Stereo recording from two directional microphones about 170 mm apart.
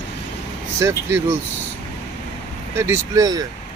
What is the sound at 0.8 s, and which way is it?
Speech, 15° right (ahead or behind).